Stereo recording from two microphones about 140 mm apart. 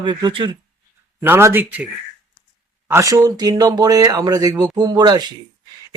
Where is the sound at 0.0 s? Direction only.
30° right (ahead or behind).